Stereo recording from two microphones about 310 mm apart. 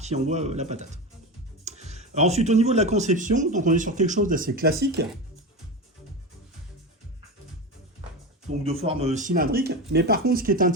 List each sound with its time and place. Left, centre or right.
0.0 s speech: right
8.4 s speech: centre